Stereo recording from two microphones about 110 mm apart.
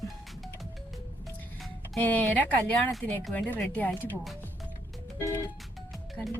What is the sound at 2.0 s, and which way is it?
Speech, 15° left (ahead or behind).